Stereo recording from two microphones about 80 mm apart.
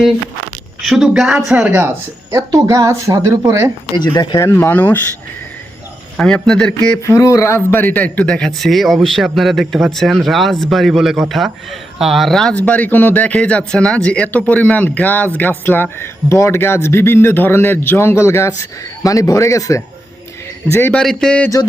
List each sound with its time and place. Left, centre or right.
0.9 s speech: centre
2.3 s speech: right
4.5 s speech: left
6.1 s a man's voice: centre
7.0 s a man's voice: left
8.3 s speech: centre
12.5 s a man's voice: centre; by 20.9 s left
20.9 s a man's voice: centre